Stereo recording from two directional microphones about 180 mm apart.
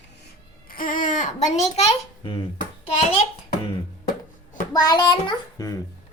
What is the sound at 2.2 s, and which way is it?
Speech, 25° left (ahead or behind).